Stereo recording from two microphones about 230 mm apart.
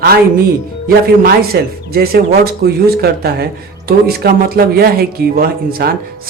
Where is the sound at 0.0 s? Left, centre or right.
Right.